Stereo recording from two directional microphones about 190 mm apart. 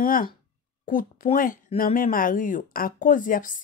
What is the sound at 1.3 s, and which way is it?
Speech, 45° left (ahead or behind).